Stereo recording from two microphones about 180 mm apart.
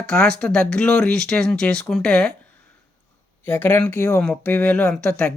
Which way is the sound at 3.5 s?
10° left (ahead or behind).